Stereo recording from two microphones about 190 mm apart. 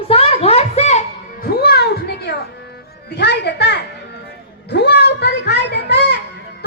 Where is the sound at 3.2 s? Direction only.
60° left (ahead or behind).